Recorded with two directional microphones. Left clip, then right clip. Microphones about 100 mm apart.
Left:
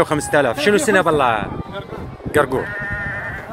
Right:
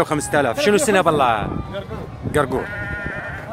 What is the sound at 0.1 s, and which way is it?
Speech, 20° right (ahead or behind).